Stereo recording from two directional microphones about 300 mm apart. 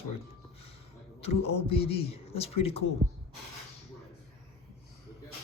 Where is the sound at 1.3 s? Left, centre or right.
Left.